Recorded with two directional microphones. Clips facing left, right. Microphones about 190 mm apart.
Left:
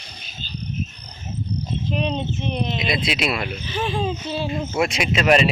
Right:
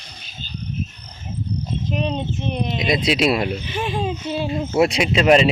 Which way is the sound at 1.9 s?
5° right (ahead or behind).